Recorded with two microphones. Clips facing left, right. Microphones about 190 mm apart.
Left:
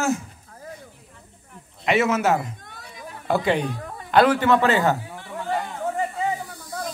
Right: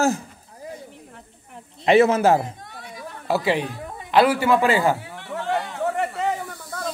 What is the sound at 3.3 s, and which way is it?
A man's voice, 5° right (ahead or behind).